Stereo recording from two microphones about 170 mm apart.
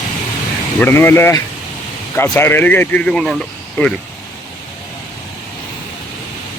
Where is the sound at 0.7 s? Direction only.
10° left (ahead or behind).